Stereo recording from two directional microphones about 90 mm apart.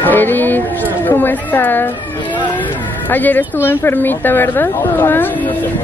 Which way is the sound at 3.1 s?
20° left (ahead or behind).